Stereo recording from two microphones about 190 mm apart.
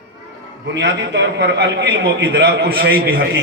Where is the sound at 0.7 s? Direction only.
70° right (ahead or behind).